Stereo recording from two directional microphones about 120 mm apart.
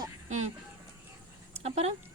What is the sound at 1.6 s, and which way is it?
Speech, 60° right (ahead or behind).